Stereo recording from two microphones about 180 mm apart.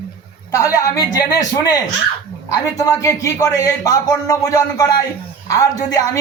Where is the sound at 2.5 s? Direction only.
20° left (ahead or behind).